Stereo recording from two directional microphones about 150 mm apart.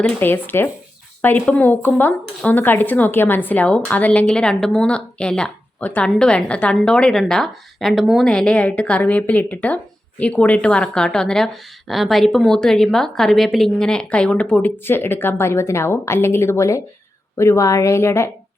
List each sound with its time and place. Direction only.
0.0 s a woman's voice: 15° left (ahead or behind)